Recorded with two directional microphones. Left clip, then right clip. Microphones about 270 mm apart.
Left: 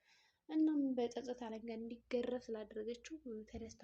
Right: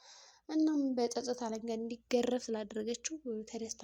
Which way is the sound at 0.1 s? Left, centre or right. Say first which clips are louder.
Right 5 dB; right.